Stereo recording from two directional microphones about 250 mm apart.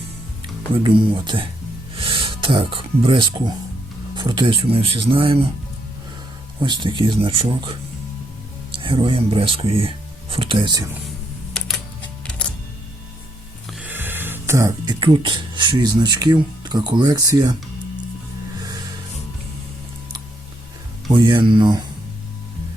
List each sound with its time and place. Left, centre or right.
0.8 s speech: centre
6.6 s speech: centre
8.8 s speech: right
12.2 s music: centre
13.7 s music: centre
15.0 s speech: centre
21.1 s speech: centre